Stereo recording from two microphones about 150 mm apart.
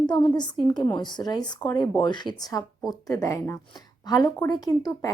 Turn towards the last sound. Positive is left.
turn(degrees=25)  # may be behind; listen again after turning